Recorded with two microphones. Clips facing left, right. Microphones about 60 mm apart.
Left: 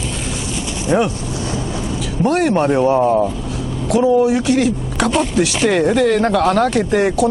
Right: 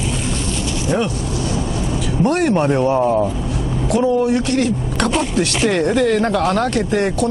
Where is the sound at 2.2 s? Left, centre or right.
Centre.